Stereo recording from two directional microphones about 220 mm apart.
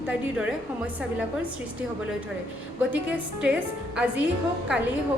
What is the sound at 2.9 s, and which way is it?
A woman's voice, 5° right (ahead or behind).